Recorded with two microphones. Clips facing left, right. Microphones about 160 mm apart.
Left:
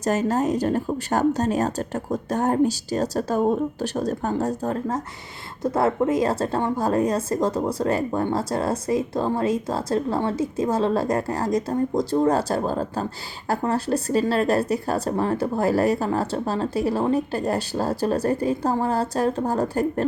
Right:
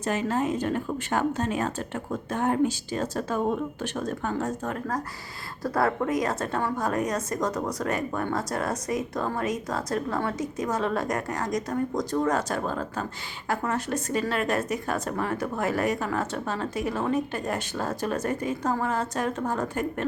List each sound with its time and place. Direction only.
0.0 s a woman's voice: 40° left (ahead or behind)